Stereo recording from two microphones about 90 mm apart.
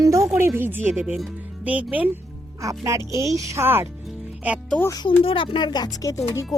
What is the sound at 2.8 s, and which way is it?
Speech, 35° right (ahead or behind).